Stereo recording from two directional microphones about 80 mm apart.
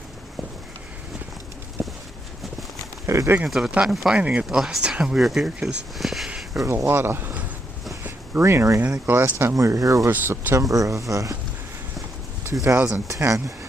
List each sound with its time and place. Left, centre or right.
1.8 s clip-clop: centre
3.1 s speech: right
3.4 s speech: centre
4.2 s speech: centre
4.4 s speech: centre
6.6 s speech: right
8.0 s a sound: right
8.8 s speech: centre
9.1 s speech: right
9.6 s speech: right
10.1 s speech: right
10.5 s speech: right
12.6 s speech: right